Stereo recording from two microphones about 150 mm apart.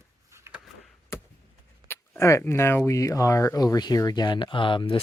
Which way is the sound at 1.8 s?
15° left (ahead or behind).